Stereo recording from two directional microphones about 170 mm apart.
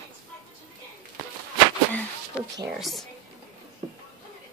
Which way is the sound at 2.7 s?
Centre (ahead or behind).